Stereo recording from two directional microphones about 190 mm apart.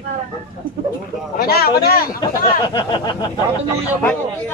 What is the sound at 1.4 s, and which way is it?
Speech, 55° left (ahead or behind).